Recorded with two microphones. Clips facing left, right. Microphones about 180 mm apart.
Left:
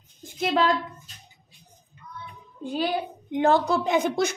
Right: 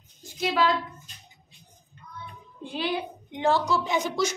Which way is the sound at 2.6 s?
45° left (ahead or behind).